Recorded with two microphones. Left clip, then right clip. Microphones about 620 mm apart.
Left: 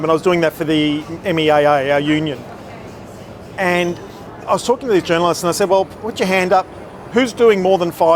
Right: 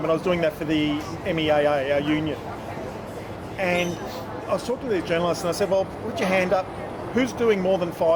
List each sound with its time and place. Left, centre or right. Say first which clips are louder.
0.1 s speech: left 8 dB; left
3.6 s a woman's voice: left 7 dB; left